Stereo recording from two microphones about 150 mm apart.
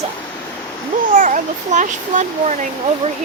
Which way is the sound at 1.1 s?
60° right (ahead or behind).